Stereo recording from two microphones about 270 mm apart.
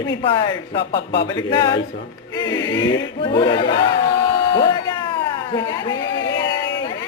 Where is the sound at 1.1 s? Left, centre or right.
Centre.